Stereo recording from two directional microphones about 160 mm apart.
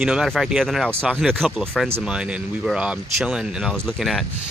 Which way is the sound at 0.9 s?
15° right (ahead or behind).